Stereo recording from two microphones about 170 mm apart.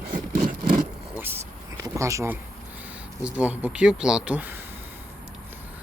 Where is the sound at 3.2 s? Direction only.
10° right (ahead or behind).